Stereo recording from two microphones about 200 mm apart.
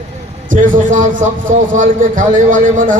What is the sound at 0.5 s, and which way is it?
A man's voice, 40° right (ahead or behind).